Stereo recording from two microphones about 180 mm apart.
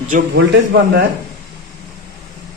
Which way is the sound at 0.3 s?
65° right (ahead or behind).